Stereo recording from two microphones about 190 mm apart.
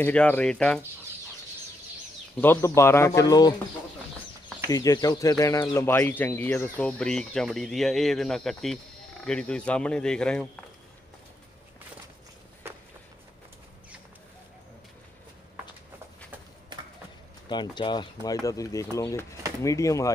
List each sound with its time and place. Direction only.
0.0 s speech: 5° left (ahead or behind)
2.4 s speech: 10° left (ahead or behind)
4.6 s speech: 20° left (ahead or behind)
17.5 s speech: 25° left (ahead or behind)